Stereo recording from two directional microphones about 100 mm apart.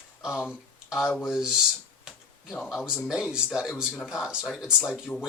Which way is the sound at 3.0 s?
10° right (ahead or behind).